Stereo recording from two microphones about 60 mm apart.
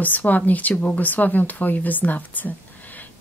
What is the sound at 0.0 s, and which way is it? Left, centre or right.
Speech, left.